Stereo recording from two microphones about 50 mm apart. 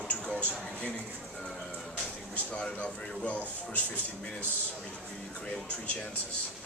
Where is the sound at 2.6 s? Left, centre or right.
Centre.